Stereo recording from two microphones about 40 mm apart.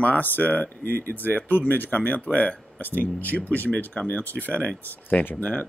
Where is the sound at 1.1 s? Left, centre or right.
Left.